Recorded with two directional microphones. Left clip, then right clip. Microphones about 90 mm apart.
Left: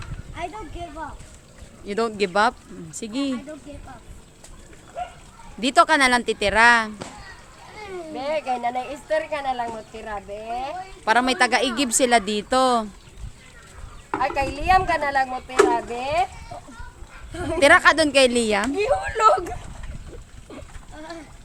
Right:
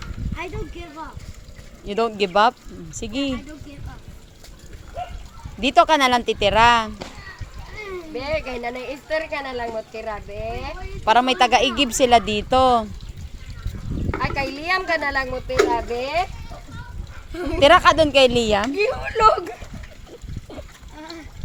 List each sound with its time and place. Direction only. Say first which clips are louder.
0.3 s speech: even; 40° left (ahead or behind)
1.9 s speech: right 2 dB; centre (ahead or behind)
5.5 s speech: right 1 dB; centre (ahead or behind)
8.1 s speech: left 1 dB; 35° left (ahead or behind)
11.0 s speech: right 3 dB; centre (ahead or behind)
14.2 s speech: left 2 dB; 60° left (ahead or behind)
17.3 s speech: even; 45° left (ahead or behind)
17.6 s speech: right 2 dB; centre (ahead or behind)
17.9 s a woman's voice: right 3 dB; 15° left (ahead or behind)
18.2 s speech: right 2 dB; 5° left (ahead or behind)
18.7 s speech: even; 50° left (ahead or behind)